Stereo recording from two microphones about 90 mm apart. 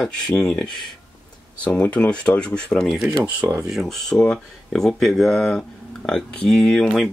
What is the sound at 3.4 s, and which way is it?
Speech, 25° right (ahead or behind).